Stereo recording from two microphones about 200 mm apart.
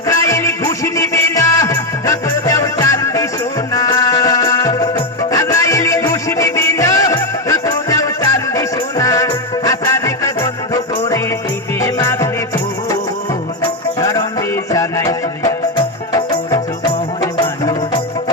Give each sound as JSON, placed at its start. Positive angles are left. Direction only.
{"t": 0.1, "sound": "music", "side_deg": 15}
{"t": 11.8, "sound": "music", "side_deg": 15}
{"t": 14.0, "sound": "music", "side_deg": 15}